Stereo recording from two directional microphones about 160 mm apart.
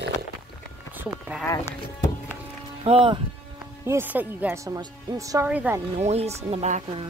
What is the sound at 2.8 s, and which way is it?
Speech, 35° right (ahead or behind).